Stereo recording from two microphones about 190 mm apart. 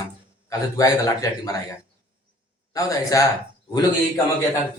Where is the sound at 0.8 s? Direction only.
15° left (ahead or behind).